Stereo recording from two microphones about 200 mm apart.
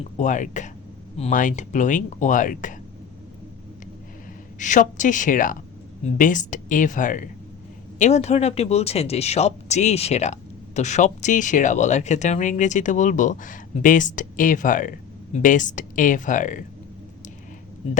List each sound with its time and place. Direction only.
0.2 s speech: 40° left (ahead or behind)
4.6 s speech: 40° left (ahead or behind)